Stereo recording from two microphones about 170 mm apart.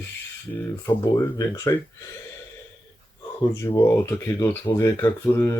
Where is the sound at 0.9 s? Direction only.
15° left (ahead or behind).